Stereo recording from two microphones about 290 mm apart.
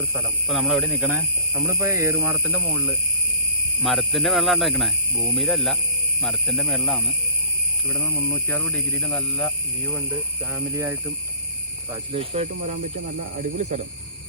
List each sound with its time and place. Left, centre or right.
0.1 s speech: centre
10.5 s speech: centre
12.1 s speech: centre
13.6 s speech: right